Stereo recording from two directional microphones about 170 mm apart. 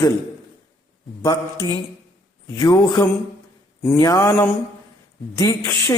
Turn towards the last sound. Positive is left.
turn(degrees=15)  # may be behind; listen again after turning